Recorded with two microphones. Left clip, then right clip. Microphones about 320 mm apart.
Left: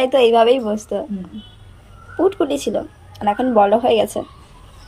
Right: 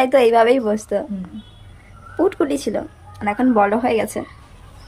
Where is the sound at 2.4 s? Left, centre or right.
Centre.